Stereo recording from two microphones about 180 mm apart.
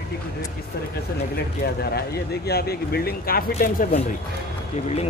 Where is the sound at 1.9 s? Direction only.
60° left (ahead or behind).